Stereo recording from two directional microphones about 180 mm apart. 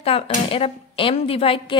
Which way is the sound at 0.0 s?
30° left (ahead or behind).